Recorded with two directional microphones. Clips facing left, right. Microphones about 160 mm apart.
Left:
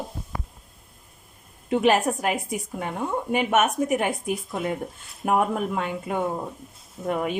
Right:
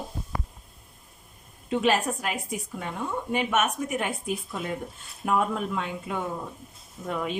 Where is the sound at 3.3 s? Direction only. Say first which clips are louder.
Left 4 dB; 55° left (ahead or behind).